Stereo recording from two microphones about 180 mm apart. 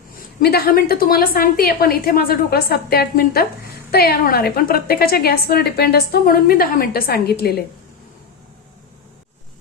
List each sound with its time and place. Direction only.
0.3 s a woman's voice: 60° left (ahead or behind)